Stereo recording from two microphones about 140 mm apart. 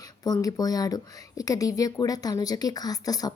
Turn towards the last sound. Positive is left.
turn(degrees=25)  # may be behind; listen again after turning